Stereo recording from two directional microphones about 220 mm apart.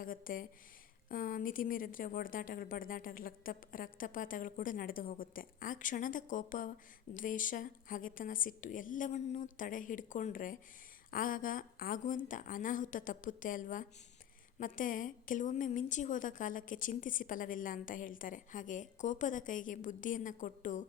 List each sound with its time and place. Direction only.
0.0 s a woman's voice: 40° left (ahead or behind)